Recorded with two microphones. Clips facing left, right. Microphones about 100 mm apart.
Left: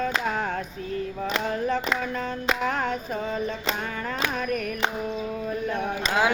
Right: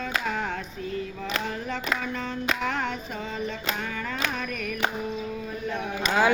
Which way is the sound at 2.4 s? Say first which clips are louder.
Left 2 dB; 40° left (ahead or behind).